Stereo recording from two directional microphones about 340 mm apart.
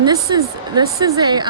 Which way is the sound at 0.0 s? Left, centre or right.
Centre.